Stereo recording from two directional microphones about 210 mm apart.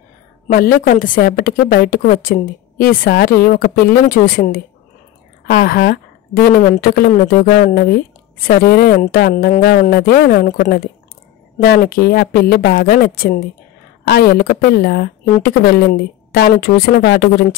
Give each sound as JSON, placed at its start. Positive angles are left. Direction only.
{"t": 0.5, "sound": "speech", "side_deg": 40}